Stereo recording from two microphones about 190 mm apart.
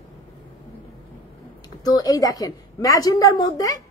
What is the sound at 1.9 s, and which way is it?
A woman's voice, 20° left (ahead or behind).